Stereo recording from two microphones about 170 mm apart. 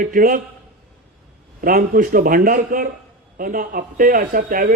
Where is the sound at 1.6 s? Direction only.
55° right (ahead or behind).